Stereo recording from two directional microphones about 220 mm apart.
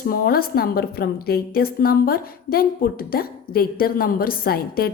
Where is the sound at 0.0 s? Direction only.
40° left (ahead or behind).